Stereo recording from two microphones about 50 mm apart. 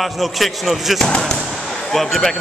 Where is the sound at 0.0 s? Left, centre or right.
Centre.